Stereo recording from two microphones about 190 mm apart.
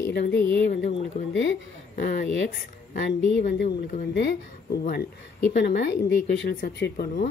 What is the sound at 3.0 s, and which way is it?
A woman's voice, 60° left (ahead or behind).